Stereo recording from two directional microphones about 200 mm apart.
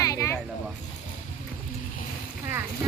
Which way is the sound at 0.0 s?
15° left (ahead or behind).